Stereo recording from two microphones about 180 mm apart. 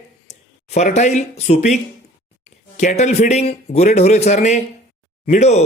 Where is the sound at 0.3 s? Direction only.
40° left (ahead or behind).